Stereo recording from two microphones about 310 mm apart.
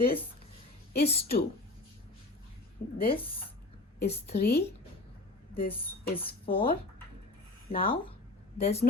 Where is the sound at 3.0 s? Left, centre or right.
Centre.